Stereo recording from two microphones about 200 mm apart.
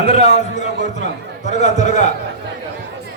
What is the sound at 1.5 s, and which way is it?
Speech, 35° left (ahead or behind).